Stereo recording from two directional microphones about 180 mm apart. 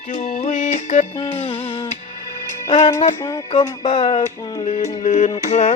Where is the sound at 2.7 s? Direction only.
40° left (ahead or behind).